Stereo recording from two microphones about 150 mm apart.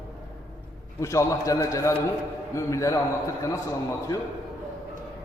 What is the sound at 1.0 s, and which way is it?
A man's voice, 20° left (ahead or behind).